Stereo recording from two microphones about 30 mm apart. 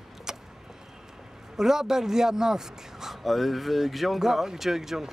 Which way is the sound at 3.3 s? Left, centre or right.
Centre.